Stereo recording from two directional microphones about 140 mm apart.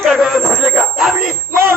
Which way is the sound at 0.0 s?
Centre (ahead or behind).